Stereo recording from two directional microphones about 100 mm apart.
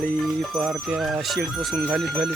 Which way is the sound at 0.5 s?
5° right (ahead or behind).